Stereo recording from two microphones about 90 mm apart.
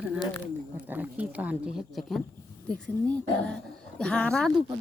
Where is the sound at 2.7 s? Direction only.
10° left (ahead or behind).